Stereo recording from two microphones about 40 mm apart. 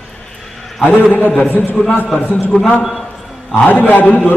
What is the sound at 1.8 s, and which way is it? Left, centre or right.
Speech, left.